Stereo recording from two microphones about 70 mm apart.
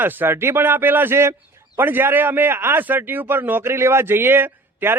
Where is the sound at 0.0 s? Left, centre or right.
Right.